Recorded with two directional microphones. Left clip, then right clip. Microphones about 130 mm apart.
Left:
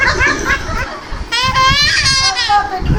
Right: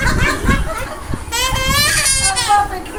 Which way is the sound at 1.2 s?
Centre (ahead or behind).